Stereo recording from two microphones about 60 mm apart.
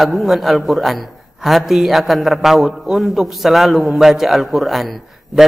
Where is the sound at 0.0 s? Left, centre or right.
Centre.